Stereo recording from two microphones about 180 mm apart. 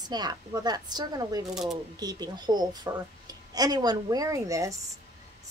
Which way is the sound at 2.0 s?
20° right (ahead or behind).